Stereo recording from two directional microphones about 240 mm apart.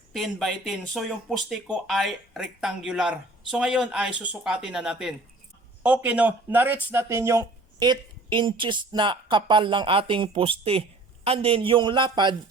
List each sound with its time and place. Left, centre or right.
0.1 s speech: centre